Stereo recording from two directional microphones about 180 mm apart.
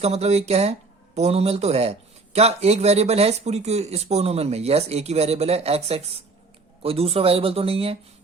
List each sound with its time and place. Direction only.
0.0 s speech: 35° right (ahead or behind)